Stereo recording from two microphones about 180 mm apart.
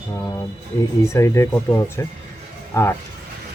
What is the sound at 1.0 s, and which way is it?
Speech, 15° left (ahead or behind).